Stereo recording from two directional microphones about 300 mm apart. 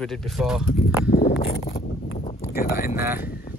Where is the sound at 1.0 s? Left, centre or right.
Left.